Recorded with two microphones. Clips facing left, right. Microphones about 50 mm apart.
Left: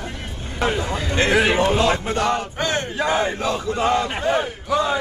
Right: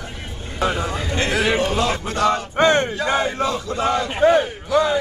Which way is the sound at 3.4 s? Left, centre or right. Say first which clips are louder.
Left 1 dB; left.